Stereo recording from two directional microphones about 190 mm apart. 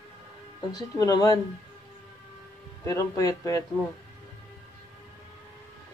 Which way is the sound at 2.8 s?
20° left (ahead or behind).